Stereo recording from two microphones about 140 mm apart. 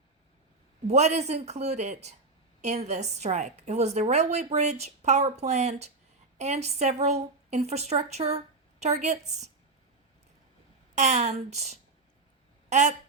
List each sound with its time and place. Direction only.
0.9 s a woman's voice: 55° right (ahead or behind)
10.9 s a woman's voice: 60° right (ahead or behind)